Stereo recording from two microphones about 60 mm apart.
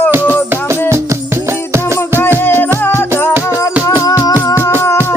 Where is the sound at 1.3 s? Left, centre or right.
Right.